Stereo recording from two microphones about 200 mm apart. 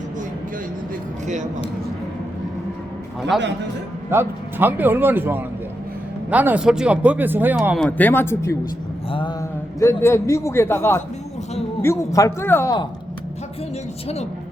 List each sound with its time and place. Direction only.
3.3 s a man's voice: centre (ahead or behind)
4.1 s speech: 10° right (ahead or behind)
7.8 s a man's voice: 10° left (ahead or behind)
9.0 s a sound: 25° left (ahead or behind)
9.4 s a man's voice: 15° left (ahead or behind)